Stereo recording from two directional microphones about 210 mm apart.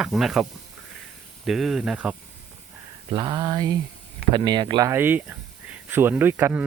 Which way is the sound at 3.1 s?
20° right (ahead or behind).